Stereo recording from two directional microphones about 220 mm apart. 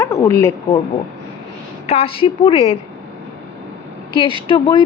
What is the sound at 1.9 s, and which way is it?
Speech, 25° left (ahead or behind).